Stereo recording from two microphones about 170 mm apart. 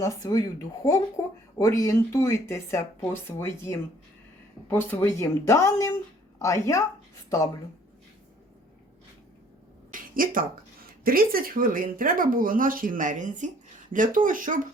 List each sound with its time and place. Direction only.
0.0 s speech: 20° left (ahead or behind)
9.9 s speech: 55° right (ahead or behind)